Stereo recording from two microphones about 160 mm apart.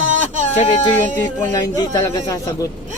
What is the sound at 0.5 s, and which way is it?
Speech, 40° left (ahead or behind).